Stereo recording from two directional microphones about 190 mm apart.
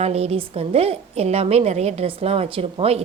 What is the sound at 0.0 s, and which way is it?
A woman's voice, 35° right (ahead or behind).